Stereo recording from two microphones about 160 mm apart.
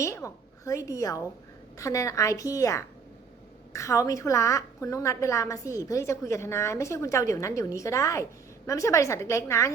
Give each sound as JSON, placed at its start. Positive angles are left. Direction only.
{"t": 0.0, "sound": "a woman's voice", "side_deg": 20}